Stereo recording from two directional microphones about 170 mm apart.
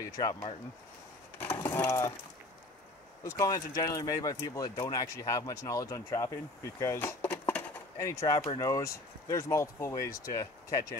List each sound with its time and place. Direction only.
0.0 s speech: 25° left (ahead or behind)
1.4 s mechanisms: 10° left (ahead or behind)
3.3 s speech: 20° left (ahead or behind)